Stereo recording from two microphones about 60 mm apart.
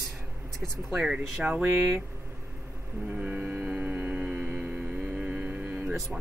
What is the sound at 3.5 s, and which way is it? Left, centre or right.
Hum, centre.